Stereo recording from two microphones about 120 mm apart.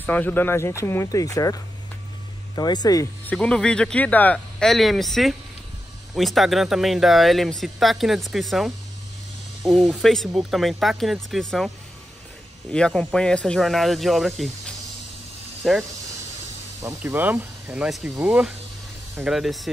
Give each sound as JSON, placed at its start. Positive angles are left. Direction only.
{"t": 0.0, "sound": "speech", "side_deg": 15}
{"t": 3.3, "sound": "speech", "side_deg": 5}
{"t": 12.7, "sound": "speech", "side_deg": 5}
{"t": 15.6, "sound": "speech", "side_deg": 0}
{"t": 17.0, "sound": "speech", "side_deg": -15}
{"t": 17.8, "sound": "speech", "side_deg": 0}
{"t": 19.2, "sound": "speech", "side_deg": 0}